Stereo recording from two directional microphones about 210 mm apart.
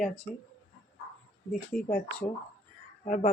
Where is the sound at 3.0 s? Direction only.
35° left (ahead or behind).